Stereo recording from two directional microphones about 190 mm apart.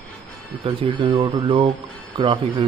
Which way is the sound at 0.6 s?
25° right (ahead or behind).